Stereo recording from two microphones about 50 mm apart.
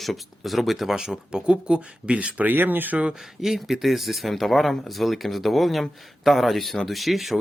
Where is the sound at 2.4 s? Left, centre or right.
Right.